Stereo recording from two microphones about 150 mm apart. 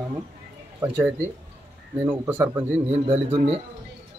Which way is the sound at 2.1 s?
15° right (ahead or behind).